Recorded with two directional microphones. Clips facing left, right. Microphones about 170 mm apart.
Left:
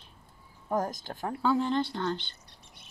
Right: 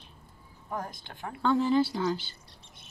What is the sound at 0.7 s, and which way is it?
Speech, 40° left (ahead or behind).